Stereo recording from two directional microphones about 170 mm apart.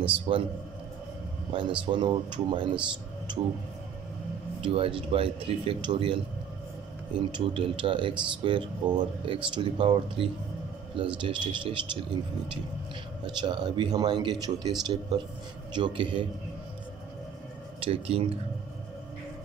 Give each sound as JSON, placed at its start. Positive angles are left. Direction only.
{"t": 0.3, "sound": "speech", "side_deg": -35}
{"t": 1.5, "sound": "speech", "side_deg": -30}
{"t": 4.6, "sound": "speech", "side_deg": -30}
{"t": 7.2, "sound": "speech", "side_deg": -30}
{"t": 13.4, "sound": "speech", "side_deg": -25}
{"t": 17.7, "sound": "speech", "side_deg": -35}